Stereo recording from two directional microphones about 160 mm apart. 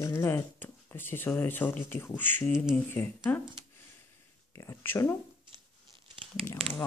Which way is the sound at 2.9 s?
15° left (ahead or behind).